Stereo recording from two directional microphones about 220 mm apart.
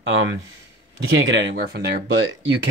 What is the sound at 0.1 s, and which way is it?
Speech, 55° right (ahead or behind).